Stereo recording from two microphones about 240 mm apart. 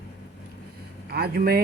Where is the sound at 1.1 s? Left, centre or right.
Right.